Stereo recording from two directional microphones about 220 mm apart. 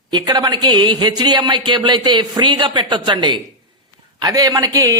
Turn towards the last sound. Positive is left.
turn(degrees=-15)  # may be behind; listen again after turning